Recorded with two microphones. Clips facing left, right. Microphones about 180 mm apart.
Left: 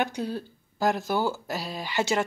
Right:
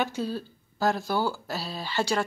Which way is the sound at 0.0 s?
20° left (ahead or behind).